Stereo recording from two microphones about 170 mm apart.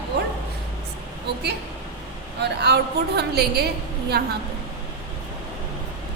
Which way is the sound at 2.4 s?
80° right.